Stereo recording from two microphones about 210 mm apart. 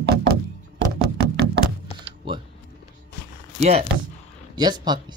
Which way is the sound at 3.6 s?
30° right (ahead or behind).